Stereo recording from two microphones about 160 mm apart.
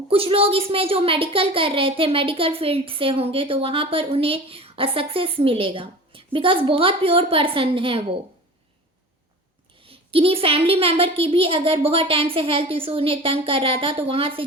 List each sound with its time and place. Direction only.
0.1 s a woman's voice: 35° right (ahead or behind)
9.8 s a woman's voice: 35° right (ahead or behind)